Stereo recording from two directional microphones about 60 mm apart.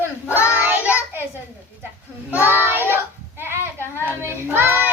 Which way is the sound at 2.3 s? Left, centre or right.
Right.